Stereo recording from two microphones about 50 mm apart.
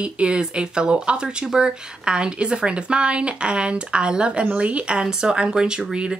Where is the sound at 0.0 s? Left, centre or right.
Right.